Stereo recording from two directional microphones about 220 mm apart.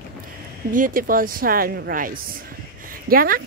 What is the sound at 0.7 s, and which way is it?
A woman's voice, 40° right (ahead or behind).